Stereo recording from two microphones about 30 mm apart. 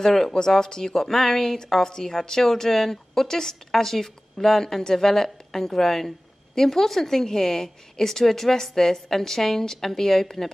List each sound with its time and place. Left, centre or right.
0.0 s a woman's voice: centre